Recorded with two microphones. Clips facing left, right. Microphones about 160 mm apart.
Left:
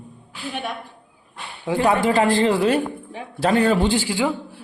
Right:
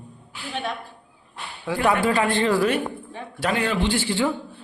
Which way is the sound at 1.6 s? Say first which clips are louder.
Left 2 dB; 20° left (ahead or behind).